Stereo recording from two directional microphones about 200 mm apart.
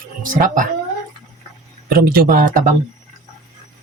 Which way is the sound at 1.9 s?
45° right (ahead or behind).